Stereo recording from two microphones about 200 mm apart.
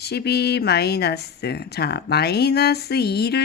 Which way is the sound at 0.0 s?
55° left (ahead or behind).